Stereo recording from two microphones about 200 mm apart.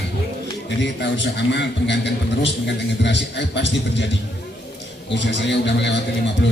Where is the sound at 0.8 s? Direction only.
60° left (ahead or behind).